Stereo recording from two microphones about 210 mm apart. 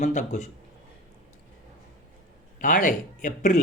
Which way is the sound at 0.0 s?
35° left (ahead or behind).